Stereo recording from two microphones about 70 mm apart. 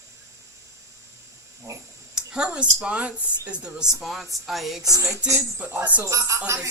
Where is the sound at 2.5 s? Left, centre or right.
Centre.